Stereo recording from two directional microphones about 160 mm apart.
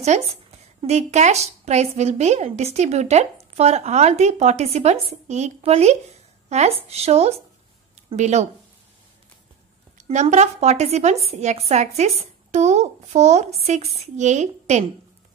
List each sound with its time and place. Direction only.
0.1 s speech: 45° right (ahead or behind)
9.9 s speech: 45° right (ahead or behind)